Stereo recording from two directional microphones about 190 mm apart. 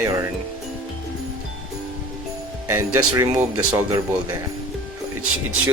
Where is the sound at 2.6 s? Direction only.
15° right (ahead or behind).